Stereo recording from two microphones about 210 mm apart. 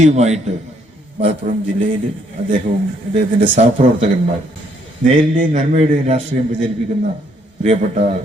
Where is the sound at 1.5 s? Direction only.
40° right (ahead or behind).